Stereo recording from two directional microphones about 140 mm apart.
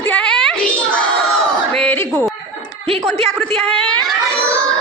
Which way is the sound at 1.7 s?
10° left (ahead or behind).